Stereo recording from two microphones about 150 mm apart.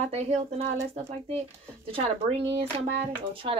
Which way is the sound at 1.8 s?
40° right (ahead or behind).